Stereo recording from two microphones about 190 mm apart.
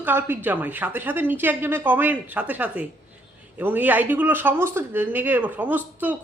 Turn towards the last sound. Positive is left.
turn(degrees=-10)  # may be behind; listen again after turning